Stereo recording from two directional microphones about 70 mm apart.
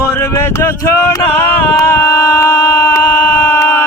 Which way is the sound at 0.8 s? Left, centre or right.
Left.